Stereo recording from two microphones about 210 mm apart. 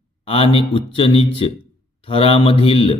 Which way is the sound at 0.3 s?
25° left (ahead or behind).